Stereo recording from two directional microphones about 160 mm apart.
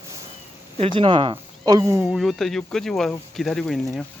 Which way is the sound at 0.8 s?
30° right (ahead or behind).